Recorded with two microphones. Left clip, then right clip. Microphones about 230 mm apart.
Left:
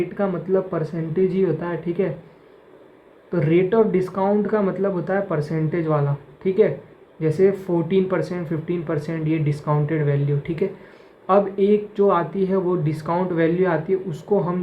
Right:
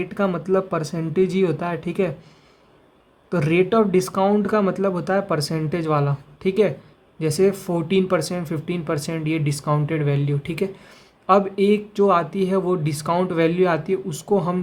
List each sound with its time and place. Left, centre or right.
0.2 s speech: right
3.2 s speech: right